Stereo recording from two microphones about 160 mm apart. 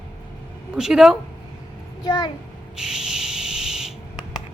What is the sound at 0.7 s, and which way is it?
Speech, 5° right (ahead or behind).